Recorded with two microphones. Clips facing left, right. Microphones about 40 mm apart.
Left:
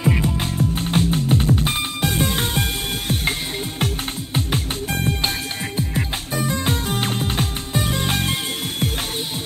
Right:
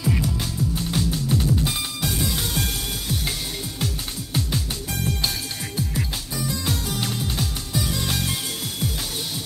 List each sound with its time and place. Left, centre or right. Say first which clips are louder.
0.0 s music: left 4 dB; left
3.8 s music: left 5 dB; left